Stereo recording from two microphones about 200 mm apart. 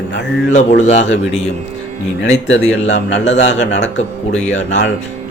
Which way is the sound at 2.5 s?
65° left (ahead or behind).